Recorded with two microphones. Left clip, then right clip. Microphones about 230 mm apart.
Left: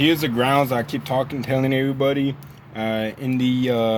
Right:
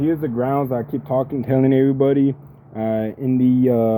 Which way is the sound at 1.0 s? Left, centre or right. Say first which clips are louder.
Right 4 dB; centre.